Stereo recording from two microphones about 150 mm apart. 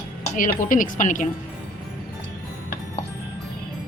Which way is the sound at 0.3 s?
60° left (ahead or behind).